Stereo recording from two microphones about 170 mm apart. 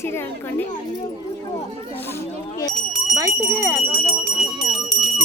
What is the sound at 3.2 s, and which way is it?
Speech, 15° right (ahead or behind).